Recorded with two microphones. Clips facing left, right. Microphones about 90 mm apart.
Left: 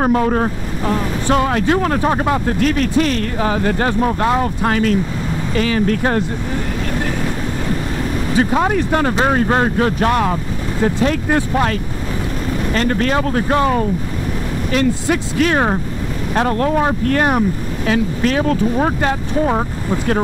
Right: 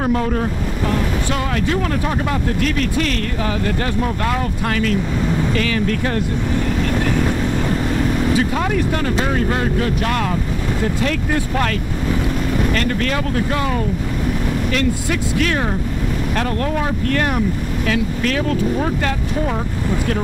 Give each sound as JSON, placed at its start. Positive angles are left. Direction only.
{"t": 0.0, "sound": "speech", "side_deg": 35}
{"t": 8.4, "sound": "speech", "side_deg": 35}
{"t": 12.7, "sound": "speech", "side_deg": 30}